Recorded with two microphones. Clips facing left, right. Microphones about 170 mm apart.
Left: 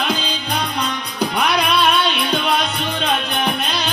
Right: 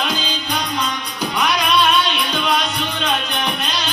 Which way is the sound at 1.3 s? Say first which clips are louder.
Right 1 dB; 60° left (ahead or behind).